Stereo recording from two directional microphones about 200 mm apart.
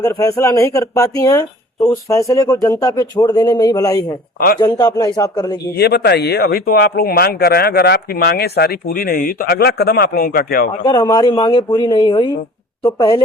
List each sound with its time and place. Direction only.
0.0 s speech: 15° left (ahead or behind)
5.7 s speech: 55° left (ahead or behind)
10.8 s speech: 20° left (ahead or behind)